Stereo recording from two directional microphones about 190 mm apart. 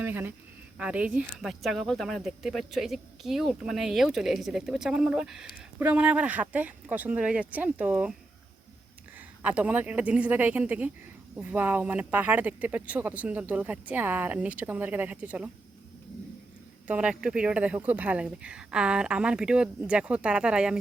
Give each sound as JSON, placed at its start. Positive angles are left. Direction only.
{"t": 0.0, "sound": "speech", "side_deg": -10}
{"t": 9.1, "sound": "speech", "side_deg": -5}
{"t": 16.8, "sound": "speech", "side_deg": -5}